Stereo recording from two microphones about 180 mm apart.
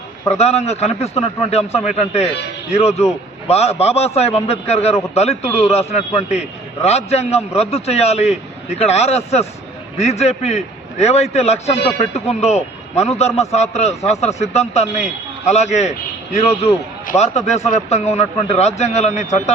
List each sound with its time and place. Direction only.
0.3 s a man's voice: 35° left (ahead or behind)